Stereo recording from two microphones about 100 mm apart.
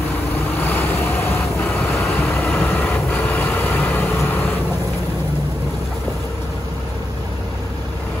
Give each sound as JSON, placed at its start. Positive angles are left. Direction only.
{"t": 0.6, "sound": "vehicle", "side_deg": 20}